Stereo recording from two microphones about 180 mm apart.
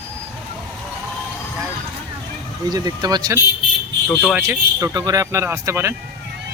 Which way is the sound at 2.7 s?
20° right (ahead or behind).